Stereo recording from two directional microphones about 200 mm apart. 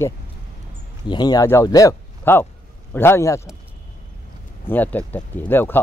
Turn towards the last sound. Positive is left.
turn(degrees=10)  # may be behind; listen again after turning